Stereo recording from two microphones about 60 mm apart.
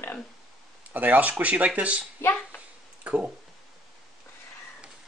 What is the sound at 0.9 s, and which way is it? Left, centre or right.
Speech, right.